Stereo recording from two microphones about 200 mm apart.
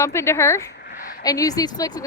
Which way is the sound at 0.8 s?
50° left (ahead or behind).